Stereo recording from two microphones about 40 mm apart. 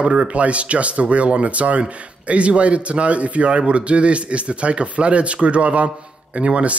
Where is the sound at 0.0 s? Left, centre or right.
Right.